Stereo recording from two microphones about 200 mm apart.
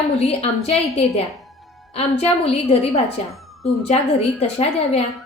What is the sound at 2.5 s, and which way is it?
A woman's voice, 30° left (ahead or behind).